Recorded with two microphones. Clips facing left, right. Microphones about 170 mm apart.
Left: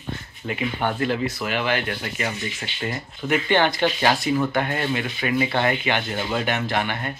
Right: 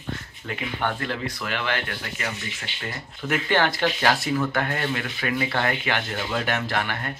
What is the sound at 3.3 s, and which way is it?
Speech, centre (ahead or behind).